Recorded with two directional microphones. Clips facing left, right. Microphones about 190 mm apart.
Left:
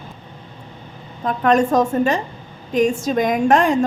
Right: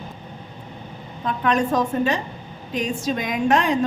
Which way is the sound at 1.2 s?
45° left (ahead or behind).